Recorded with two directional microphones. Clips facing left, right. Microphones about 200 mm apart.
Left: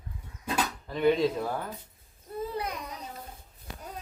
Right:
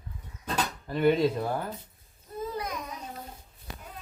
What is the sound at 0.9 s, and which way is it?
Speech, 5° right (ahead or behind).